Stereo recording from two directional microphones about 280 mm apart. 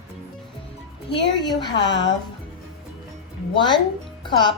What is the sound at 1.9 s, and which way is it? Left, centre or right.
Speech, left.